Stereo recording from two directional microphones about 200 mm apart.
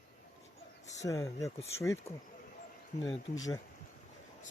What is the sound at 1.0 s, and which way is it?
Speech, 15° left (ahead or behind).